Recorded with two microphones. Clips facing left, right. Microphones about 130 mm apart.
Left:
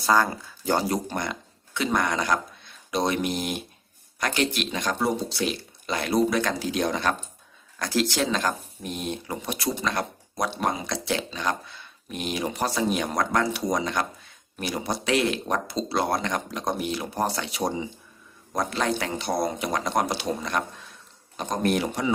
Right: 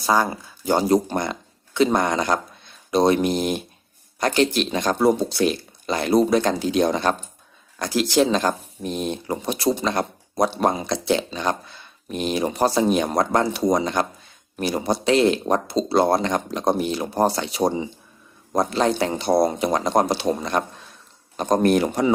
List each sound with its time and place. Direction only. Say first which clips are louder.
0.0 s speech: right 2 dB; 15° right (ahead or behind)
0.9 s speech: right 8 dB; 30° right (ahead or behind)
7.8 s speech: right 6 dB; 15° right (ahead or behind); by 22.1 s 45° right (ahead or behind)